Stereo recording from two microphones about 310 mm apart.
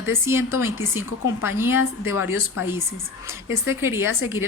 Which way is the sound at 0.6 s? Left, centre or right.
Centre.